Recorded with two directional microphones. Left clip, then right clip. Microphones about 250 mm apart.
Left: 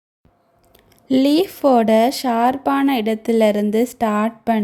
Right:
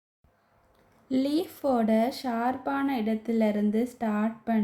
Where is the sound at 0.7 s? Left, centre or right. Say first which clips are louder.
Left 11 dB; left.